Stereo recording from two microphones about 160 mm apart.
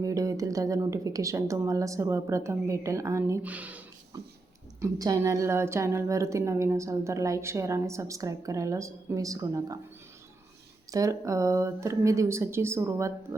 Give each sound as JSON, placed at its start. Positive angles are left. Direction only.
{"t": 0.0, "sound": "a woman's voice", "side_deg": -20}
{"t": 4.8, "sound": "a woman's voice", "side_deg": -20}
{"t": 10.9, "sound": "a woman's voice", "side_deg": -20}